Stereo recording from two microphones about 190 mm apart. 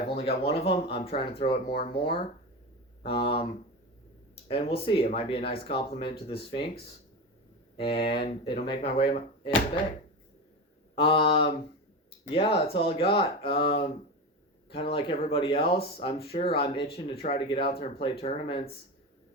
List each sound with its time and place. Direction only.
0.2 s speech: 30° left (ahead or behind)
10.9 s speech: 30° left (ahead or behind)
14.7 s speech: 30° left (ahead or behind)